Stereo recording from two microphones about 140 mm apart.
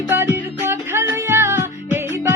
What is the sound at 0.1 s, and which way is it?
Music, 15° right (ahead or behind).